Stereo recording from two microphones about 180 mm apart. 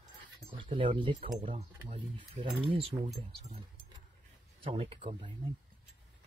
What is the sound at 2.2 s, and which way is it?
Speech, 30° right (ahead or behind).